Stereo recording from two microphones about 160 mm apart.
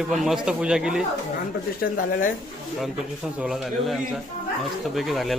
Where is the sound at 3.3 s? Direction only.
Centre (ahead or behind).